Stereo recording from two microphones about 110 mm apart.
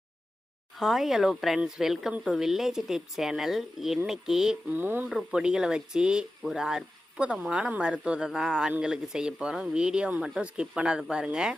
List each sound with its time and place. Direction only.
0.8 s speech: centre (ahead or behind)
4.7 s speech: 20° right (ahead or behind)
5.0 s speech: 5° right (ahead or behind)